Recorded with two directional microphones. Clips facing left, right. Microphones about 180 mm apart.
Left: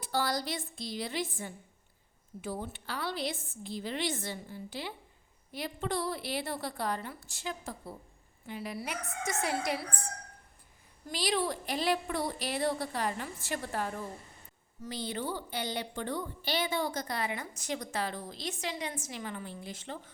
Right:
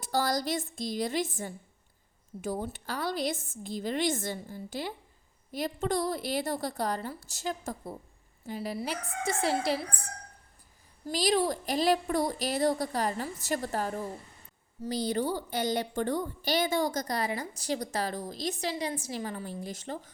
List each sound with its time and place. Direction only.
0.0 s a woman's voice: 45° right (ahead or behind)
11.0 s a woman's voice: 40° right (ahead or behind)